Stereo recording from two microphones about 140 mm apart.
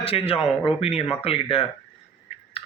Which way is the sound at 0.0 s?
45° left (ahead or behind).